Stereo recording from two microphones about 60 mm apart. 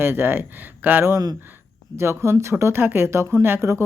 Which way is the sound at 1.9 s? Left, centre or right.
Right.